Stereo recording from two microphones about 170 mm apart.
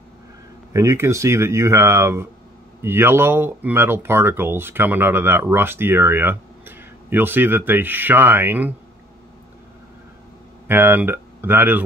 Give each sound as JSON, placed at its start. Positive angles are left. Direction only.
{"t": 0.7, "sound": "speech", "side_deg": -15}
{"t": 10.7, "sound": "speech", "side_deg": -10}